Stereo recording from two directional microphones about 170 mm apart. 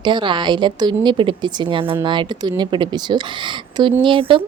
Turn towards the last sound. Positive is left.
turn(degrees=-30)  # may be behind; listen again after turning